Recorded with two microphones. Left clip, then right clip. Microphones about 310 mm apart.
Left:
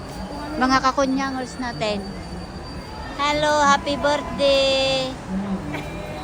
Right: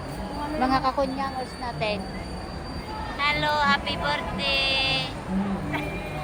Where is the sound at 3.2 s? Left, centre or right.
Centre.